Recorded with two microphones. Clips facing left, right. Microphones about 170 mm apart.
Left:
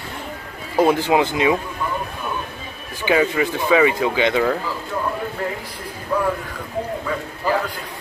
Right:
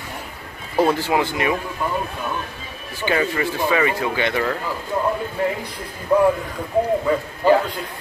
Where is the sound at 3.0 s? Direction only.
15° left (ahead or behind).